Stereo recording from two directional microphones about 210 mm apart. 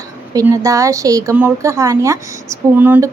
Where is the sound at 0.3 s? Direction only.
15° right (ahead or behind).